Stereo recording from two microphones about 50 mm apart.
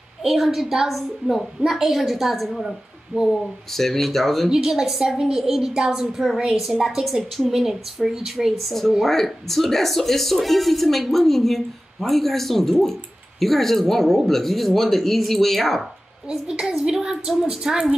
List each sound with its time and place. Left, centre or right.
0.2 s speech: centre
3.1 s a woman's voice: centre
3.7 s speech: centre
4.5 s a woman's voice: centre
9.0 s speech: centre
16.3 s a woman's voice: centre